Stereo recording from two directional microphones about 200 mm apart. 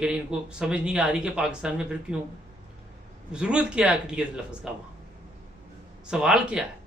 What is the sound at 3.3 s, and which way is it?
A man's voice, 5° right (ahead or behind).